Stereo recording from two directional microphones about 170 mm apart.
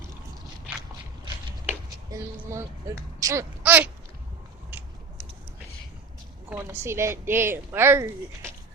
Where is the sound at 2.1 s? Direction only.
15° right (ahead or behind).